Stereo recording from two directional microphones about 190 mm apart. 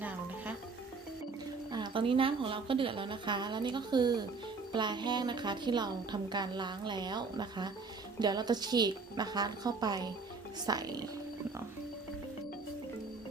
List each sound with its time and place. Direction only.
0.0 s frying: 10° right (ahead or behind)
1.7 s a woman's voice: 25° right (ahead or behind)